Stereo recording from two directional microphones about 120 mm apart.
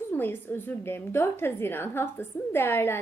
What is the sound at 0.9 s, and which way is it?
A woman's voice, 20° left (ahead or behind).